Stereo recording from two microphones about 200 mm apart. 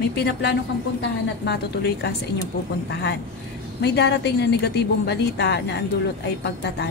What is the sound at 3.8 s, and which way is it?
A woman's voice, 55° left (ahead or behind).